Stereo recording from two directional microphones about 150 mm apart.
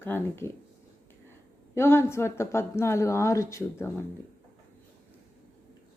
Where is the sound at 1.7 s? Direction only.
15° left (ahead or behind).